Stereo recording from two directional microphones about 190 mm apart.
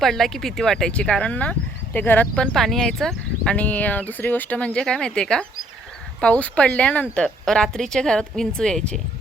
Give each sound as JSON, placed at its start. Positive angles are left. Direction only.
{"t": 0.0, "sound": "speech", "side_deg": 0}